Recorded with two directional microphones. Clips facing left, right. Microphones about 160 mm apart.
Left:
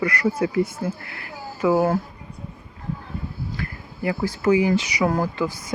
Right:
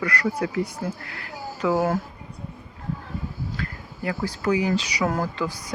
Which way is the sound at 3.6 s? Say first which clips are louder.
Left 2 dB; 10° left (ahead or behind).